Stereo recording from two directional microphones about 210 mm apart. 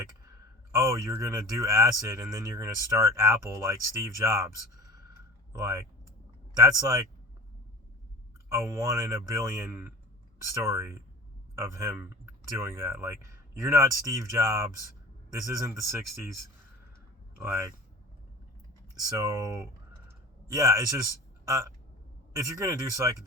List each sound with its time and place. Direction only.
0.7 s speech: 15° right (ahead or behind)
5.5 s speech: 15° right (ahead or behind)
8.4 s speech: 15° right (ahead or behind)
17.4 s speech: 10° right (ahead or behind)
19.0 s speech: 15° right (ahead or behind)
20.1 s a sound: 15° right (ahead or behind)
22.4 s speech: 15° right (ahead or behind)